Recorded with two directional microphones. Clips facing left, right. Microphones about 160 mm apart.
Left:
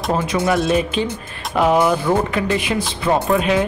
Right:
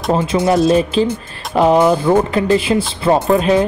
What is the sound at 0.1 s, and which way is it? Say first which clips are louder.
Speech: right 4 dB; 30° right (ahead or behind).